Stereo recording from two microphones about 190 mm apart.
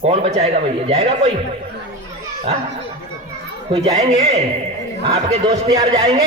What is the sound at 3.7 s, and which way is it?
A man's voice, 35° right (ahead or behind).